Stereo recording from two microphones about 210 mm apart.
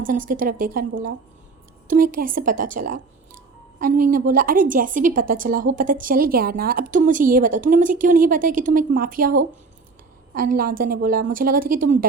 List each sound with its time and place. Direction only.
0.0 s a woman's voice: 40° right (ahead or behind)